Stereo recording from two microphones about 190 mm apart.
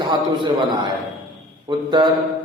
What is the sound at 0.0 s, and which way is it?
A man's voice, 25° right (ahead or behind).